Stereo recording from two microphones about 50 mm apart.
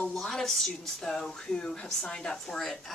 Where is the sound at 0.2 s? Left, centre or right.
Centre.